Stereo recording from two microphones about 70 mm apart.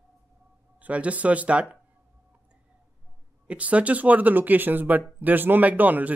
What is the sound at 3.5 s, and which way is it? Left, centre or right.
A man's voice, centre.